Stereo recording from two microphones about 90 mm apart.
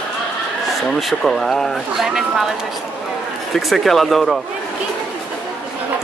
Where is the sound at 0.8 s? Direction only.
Centre (ahead or behind).